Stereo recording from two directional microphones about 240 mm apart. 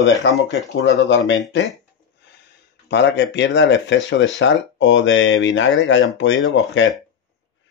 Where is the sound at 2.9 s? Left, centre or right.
Left.